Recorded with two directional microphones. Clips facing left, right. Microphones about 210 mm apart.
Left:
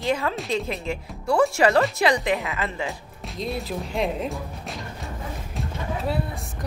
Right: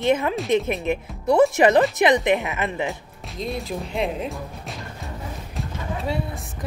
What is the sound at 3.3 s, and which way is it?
Speech, centre (ahead or behind).